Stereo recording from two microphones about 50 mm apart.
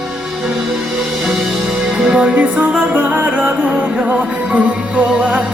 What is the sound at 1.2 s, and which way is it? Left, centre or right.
Music, centre.